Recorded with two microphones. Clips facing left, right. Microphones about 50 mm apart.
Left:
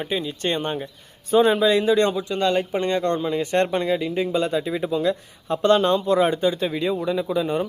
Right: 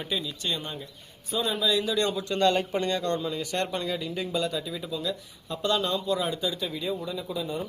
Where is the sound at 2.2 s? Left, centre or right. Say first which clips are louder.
Left 2 dB; centre; by 7.6 s left.